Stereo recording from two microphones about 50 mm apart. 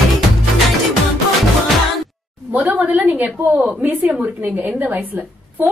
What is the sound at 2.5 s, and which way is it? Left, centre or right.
Speech, right.